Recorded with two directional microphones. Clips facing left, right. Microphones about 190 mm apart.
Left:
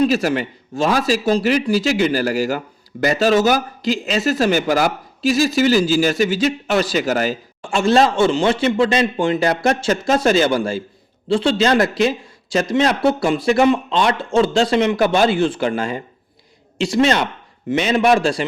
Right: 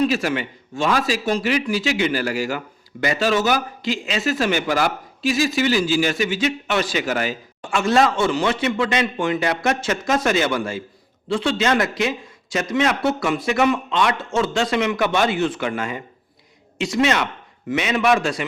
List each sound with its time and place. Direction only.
0.0 s a man's voice: 40° left (ahead or behind)